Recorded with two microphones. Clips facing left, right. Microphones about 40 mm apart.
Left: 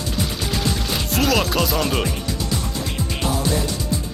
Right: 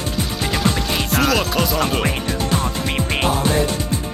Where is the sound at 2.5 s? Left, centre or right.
Right.